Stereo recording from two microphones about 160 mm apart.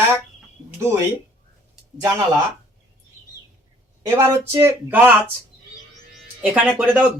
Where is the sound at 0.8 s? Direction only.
15° right (ahead or behind).